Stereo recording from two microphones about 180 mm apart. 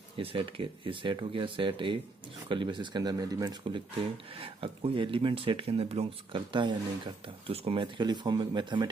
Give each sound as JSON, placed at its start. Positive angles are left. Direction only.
{"t": 0.2, "sound": "speech", "side_deg": -30}